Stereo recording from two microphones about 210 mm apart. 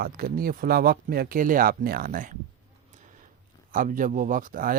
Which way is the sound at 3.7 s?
40° right (ahead or behind).